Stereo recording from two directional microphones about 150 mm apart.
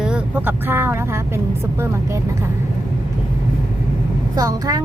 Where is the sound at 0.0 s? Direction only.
10° right (ahead or behind).